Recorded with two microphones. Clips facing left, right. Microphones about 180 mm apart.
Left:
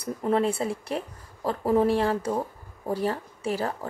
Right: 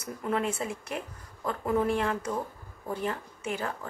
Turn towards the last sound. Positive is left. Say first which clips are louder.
# left 5 dB
turn(degrees=35)  # may be behind; listen again after turning